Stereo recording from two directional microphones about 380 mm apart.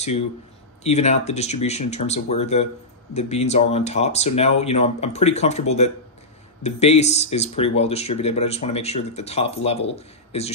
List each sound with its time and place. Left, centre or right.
0.8 s speech: centre